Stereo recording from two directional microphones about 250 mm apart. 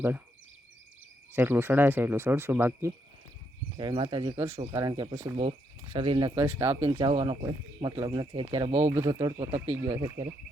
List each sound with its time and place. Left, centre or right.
1.3 s speech: centre
3.8 s speech: centre